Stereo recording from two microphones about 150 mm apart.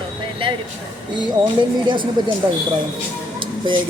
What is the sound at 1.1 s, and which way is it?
Speech, 30° right (ahead or behind).